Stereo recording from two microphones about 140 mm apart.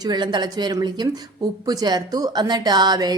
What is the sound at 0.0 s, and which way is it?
A woman's voice, 30° right (ahead or behind).